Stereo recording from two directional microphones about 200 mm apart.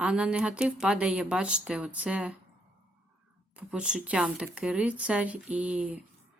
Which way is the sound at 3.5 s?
5° right (ahead or behind).